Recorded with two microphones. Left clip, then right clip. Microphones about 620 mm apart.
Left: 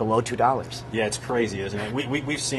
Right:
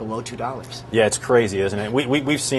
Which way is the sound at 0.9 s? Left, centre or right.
Right.